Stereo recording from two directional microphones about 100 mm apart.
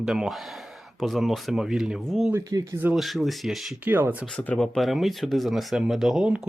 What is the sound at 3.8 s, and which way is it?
Speech, 20° right (ahead or behind).